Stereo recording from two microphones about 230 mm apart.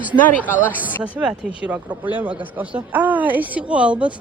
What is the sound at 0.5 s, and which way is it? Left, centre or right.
Speech, centre.